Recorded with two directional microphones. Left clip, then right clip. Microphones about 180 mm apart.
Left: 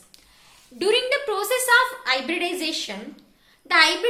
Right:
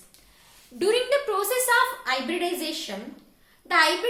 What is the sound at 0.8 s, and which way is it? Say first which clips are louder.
A woman's voice: left 1 dB; 15° left (ahead or behind).